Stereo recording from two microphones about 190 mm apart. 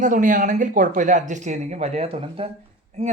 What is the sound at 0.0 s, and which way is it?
Speech, 45° right (ahead or behind).